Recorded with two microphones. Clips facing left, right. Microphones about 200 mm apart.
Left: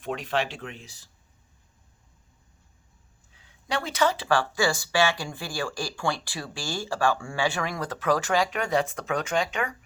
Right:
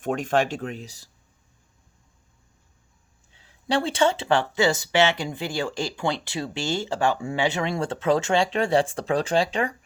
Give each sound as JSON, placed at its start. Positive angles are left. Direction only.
{"t": 0.0, "sound": "speech", "side_deg": -45}
{"t": 3.3, "sound": "speech", "side_deg": -30}